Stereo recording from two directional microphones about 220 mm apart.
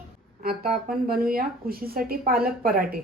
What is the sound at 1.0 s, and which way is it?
Speech, 40° right (ahead or behind).